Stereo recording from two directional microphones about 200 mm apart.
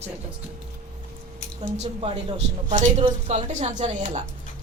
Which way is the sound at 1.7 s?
30° right (ahead or behind).